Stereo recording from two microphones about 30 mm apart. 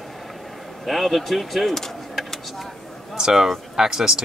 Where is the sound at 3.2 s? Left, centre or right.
Centre.